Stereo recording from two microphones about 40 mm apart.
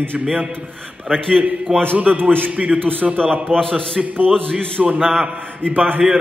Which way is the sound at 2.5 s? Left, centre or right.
Right.